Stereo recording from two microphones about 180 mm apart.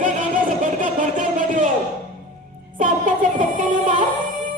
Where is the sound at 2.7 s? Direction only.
45° right (ahead or behind).